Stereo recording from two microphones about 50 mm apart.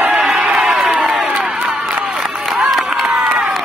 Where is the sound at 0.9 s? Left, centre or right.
Centre.